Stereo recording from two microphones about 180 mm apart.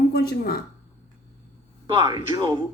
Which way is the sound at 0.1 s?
60° left (ahead or behind).